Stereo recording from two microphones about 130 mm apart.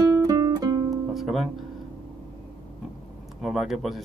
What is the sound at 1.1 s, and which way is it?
Music, centre (ahead or behind).